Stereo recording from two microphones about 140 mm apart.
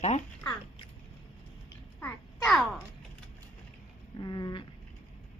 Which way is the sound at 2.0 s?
15° left (ahead or behind).